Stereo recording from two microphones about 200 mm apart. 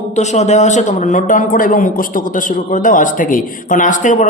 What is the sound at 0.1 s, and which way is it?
A man's voice, 35° left (ahead or behind).